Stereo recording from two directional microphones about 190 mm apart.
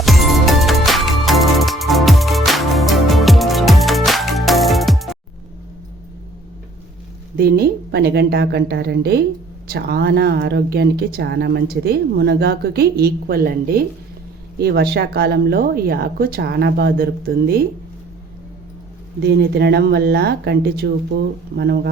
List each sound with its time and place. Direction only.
0.0 s music: centre (ahead or behind)
7.3 s a woman's voice: 55° right (ahead or behind)
19.2 s speech: 60° right (ahead or behind)